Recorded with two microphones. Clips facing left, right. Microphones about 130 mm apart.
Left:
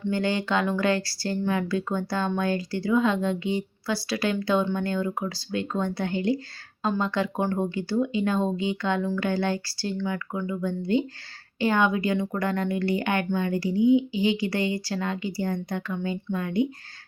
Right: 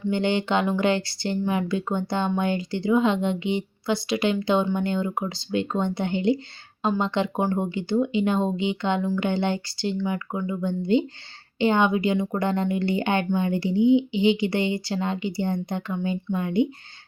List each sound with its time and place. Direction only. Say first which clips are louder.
0.1 s speech: right 2 dB; 25° right (ahead or behind)